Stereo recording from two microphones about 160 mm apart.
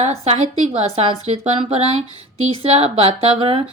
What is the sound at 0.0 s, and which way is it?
Speech, 40° right (ahead or behind).